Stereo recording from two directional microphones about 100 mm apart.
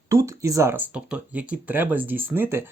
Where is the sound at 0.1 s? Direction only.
30° right (ahead or behind).